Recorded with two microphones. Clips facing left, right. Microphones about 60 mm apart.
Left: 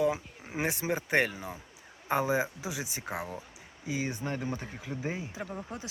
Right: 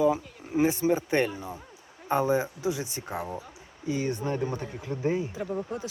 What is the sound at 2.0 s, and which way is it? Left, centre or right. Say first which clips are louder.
Speech: right 3 dB; centre.